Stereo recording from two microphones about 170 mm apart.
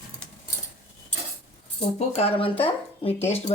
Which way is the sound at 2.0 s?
40° left (ahead or behind).